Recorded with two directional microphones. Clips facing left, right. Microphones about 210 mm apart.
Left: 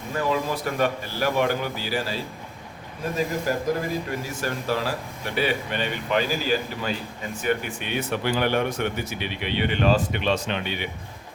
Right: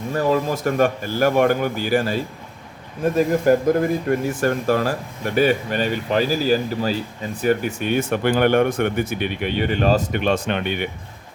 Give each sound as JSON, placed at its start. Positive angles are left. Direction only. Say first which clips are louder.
{"t": 0.1, "sound": "speech", "louder": "right 5 dB", "side_deg": -45}
{"t": 3.2, "sound": "speech", "louder": "right 9 dB", "side_deg": -50}